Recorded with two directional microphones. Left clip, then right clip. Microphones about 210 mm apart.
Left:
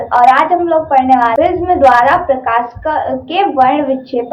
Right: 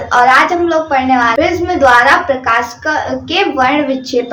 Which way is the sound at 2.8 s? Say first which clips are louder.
Even; 15° right (ahead or behind).